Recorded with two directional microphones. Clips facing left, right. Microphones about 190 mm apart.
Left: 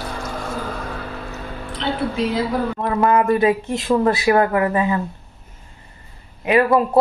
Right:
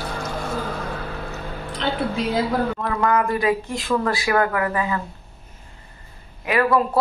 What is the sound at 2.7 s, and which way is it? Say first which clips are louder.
A man's voice: left 4 dB; 25° left (ahead or behind).